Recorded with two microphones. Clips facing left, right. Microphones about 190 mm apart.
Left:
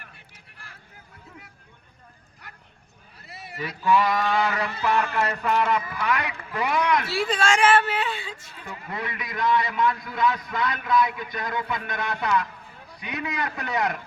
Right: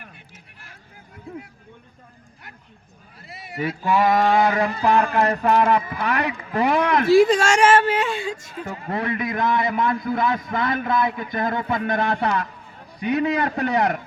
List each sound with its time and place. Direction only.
3.8 s a man's voice: 50° right (ahead or behind)
13.6 s speech: 30° right (ahead or behind)